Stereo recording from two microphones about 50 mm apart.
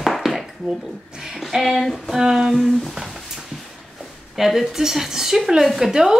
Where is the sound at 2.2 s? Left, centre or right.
Centre.